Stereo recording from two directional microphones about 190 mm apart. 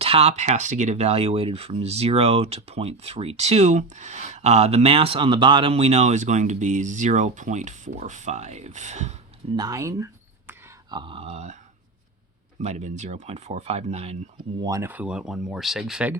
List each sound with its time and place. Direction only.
0.0 s speech: 30° right (ahead or behind)
9.6 s speech: 15° right (ahead or behind)
10.9 s speech: 25° right (ahead or behind)
12.5 s speech: 35° right (ahead or behind)
14.6 s speech: 15° right (ahead or behind)